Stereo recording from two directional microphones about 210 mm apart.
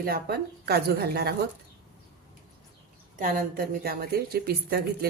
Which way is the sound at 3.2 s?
40° right (ahead or behind).